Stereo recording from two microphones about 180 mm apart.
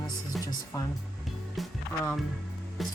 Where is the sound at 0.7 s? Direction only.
15° left (ahead or behind).